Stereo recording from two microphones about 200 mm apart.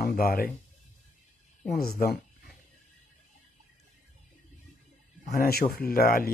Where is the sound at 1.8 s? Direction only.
50° left (ahead or behind).